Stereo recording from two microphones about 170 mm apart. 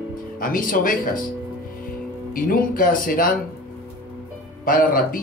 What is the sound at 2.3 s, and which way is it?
Speech, 55° left (ahead or behind).